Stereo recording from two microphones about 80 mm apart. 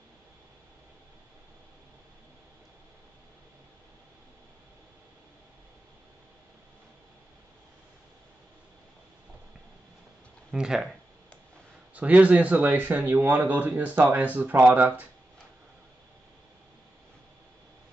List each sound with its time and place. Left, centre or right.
10.5 s speech: centre
11.9 s speech: centre